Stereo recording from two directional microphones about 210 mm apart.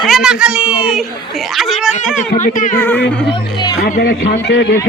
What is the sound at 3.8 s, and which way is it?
Speech, 45° left (ahead or behind).